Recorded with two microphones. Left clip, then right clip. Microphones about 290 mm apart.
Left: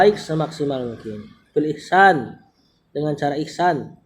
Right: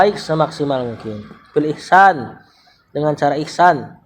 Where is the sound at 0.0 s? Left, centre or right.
Centre.